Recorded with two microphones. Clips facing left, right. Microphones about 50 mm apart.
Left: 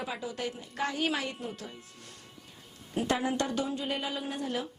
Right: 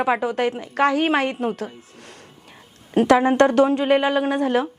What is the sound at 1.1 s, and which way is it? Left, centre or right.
Speech, right.